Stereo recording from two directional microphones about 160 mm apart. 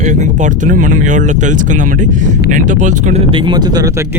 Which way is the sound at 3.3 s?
30° right (ahead or behind).